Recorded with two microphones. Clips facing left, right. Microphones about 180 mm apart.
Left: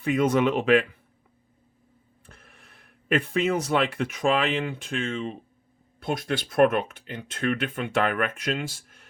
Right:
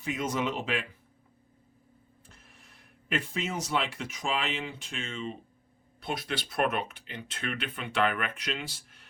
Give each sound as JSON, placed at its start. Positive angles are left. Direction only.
{"t": 0.0, "sound": "speech", "side_deg": 60}
{"t": 2.2, "sound": "speech", "side_deg": 60}